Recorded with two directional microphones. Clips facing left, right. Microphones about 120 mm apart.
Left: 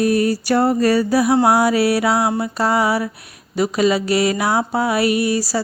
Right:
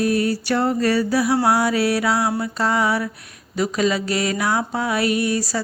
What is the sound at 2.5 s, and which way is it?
Music, 35° left (ahead or behind).